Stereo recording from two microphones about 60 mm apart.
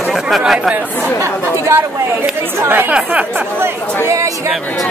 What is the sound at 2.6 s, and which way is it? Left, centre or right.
Speech, right.